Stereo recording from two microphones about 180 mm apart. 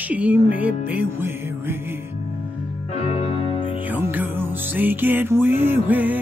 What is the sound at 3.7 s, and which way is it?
Music, 10° right (ahead or behind).